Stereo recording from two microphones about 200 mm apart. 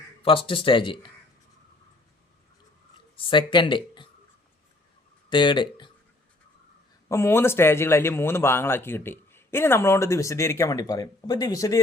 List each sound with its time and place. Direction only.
0.2 s speech: 25° left (ahead or behind)
3.2 s speech: 25° left (ahead or behind)
5.3 s speech: 25° left (ahead or behind)
7.1 s speech: 10° left (ahead or behind)